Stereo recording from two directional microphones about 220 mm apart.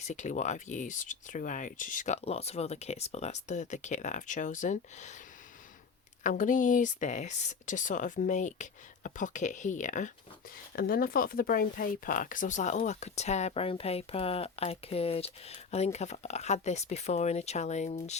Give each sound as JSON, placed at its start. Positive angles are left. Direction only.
{"t": 0.0, "sound": "speech", "side_deg": 35}
{"t": 6.2, "sound": "speech", "side_deg": 35}